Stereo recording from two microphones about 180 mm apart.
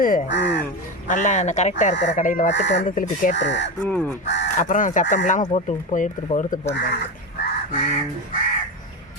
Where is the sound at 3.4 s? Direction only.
75° left (ahead or behind).